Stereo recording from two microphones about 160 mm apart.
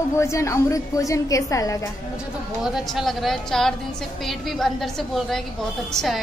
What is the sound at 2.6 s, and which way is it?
A woman's voice, centre (ahead or behind).